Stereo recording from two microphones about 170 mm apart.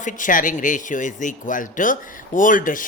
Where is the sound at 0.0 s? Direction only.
50° left (ahead or behind).